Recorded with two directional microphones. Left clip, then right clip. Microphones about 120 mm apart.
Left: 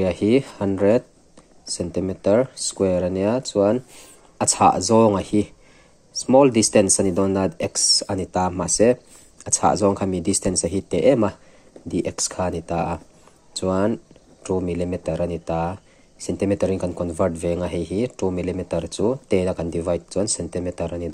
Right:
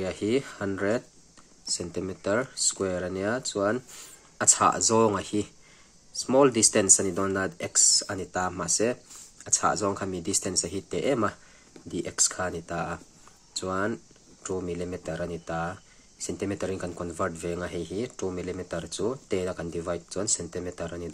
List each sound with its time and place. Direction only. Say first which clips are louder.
0.0 s speech: left 9 dB; 35° left (ahead or behind); by 4.1 s 20° left (ahead or behind)
4.4 s speech: left 6 dB; 30° left (ahead or behind)